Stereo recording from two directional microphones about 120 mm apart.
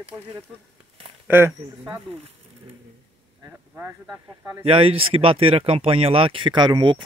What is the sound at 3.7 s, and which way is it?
Speech, 15° right (ahead or behind).